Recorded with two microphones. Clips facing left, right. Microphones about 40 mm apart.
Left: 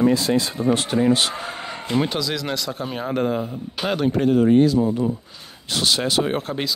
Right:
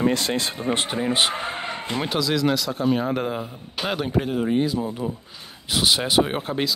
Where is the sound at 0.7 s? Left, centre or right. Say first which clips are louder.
Left 4 dB; right.